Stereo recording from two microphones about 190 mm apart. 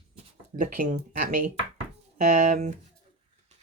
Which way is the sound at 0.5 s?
45° right (ahead or behind).